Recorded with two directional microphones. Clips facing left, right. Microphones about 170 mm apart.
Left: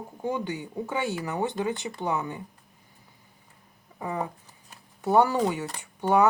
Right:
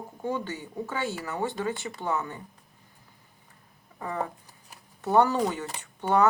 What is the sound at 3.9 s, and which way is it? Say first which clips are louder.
Speech: left 1 dB; 15° left (ahead or behind).